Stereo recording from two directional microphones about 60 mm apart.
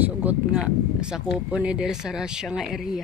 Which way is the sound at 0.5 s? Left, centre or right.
Centre.